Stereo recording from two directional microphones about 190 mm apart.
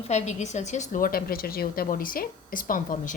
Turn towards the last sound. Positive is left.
turn(degrees=45)  # may be behind; listen again after turning